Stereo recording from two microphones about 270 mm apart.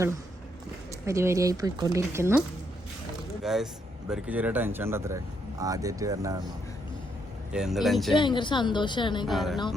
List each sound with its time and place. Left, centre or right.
1.0 s speech: centre
3.4 s speech: centre
7.5 s speech: centre
8.2 s a woman's voice: centre
9.2 s speech: centre